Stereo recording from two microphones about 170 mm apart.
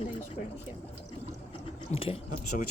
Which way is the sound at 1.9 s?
35° left (ahead or behind).